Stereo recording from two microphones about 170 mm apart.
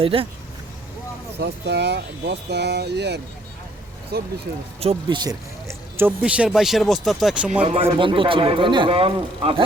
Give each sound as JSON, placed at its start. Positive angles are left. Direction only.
{"t": 0.0, "sound": "a man's voice", "side_deg": -35}
{"t": 1.4, "sound": "speech", "side_deg": -75}
{"t": 4.8, "sound": "speech", "side_deg": -30}
{"t": 7.6, "sound": "a man's voice", "side_deg": -35}